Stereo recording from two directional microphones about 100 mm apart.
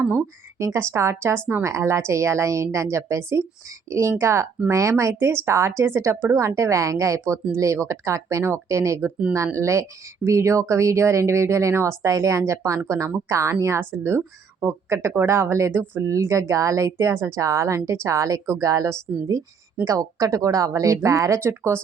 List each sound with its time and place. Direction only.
0.0 s speech: 20° right (ahead or behind)